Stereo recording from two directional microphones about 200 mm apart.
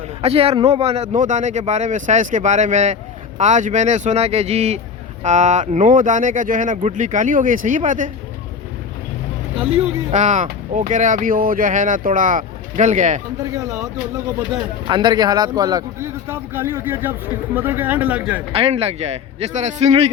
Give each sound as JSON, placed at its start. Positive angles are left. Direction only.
{"t": 0.2, "sound": "speech", "side_deg": -30}
{"t": 10.1, "sound": "speech", "side_deg": -35}
{"t": 14.8, "sound": "speech", "side_deg": -20}
{"t": 18.5, "sound": "speech", "side_deg": -30}